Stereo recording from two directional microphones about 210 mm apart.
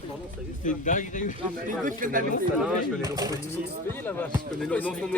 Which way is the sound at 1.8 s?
40° right (ahead or behind).